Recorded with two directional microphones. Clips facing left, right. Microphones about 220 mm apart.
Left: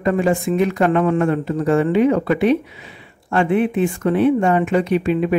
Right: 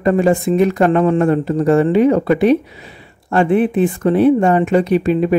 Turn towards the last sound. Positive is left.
turn(degrees=-40)  # may be behind; listen again after turning